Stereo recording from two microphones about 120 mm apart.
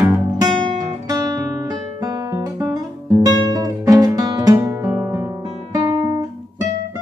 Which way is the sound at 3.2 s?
35° right (ahead or behind).